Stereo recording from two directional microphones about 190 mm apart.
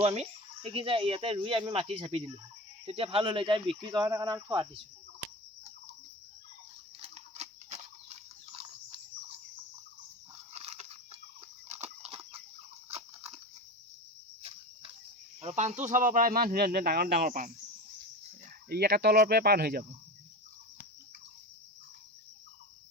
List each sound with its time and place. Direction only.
0.0 s speech: 30° right (ahead or behind)
7.0 s livestock: 35° right (ahead or behind)
10.5 s chicken: 35° right (ahead or behind)
12.9 s a sound: 35° right (ahead or behind)
14.4 s cricket: 30° right (ahead or behind)
15.4 s speech: 35° right (ahead or behind)
18.7 s speech: 55° right (ahead or behind)